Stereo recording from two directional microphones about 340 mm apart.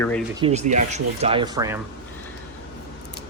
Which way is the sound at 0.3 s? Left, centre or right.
Centre.